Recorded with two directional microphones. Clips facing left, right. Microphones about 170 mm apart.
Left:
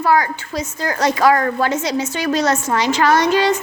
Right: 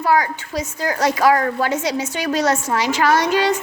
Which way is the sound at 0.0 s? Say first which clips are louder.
Left 1 dB; 10° right (ahead or behind).